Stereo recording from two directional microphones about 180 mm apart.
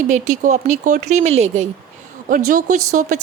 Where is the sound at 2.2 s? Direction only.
50° right (ahead or behind).